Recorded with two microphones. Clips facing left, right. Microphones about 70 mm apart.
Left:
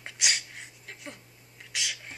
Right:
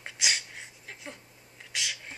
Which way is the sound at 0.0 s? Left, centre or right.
Centre.